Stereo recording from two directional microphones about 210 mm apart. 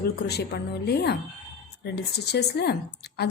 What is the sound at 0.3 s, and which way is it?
Speech, 50° left (ahead or behind).